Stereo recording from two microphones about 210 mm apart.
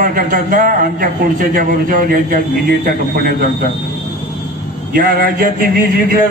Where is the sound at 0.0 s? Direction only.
40° right (ahead or behind).